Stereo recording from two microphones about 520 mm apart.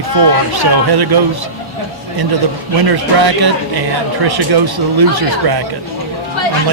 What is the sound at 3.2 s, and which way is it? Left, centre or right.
Speech, right.